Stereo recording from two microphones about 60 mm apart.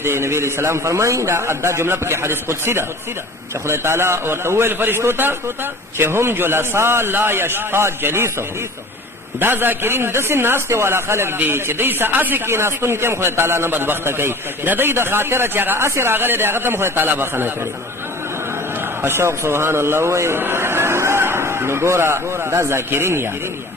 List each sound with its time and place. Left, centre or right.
0.0 s a man's voice: right
9.4 s a man's voice: right
12.5 s a man's voice: right
19.0 s a man's voice: right